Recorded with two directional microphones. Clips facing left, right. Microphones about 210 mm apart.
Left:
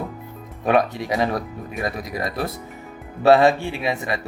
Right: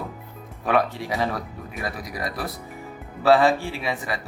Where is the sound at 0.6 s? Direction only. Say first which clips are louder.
Left 3 dB; 20° left (ahead or behind).